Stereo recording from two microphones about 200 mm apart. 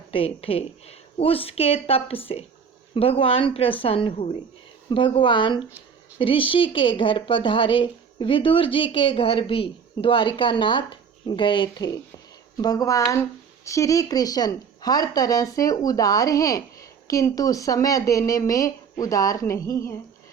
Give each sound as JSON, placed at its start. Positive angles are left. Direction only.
{"t": 0.1, "sound": "a woman's voice", "side_deg": 30}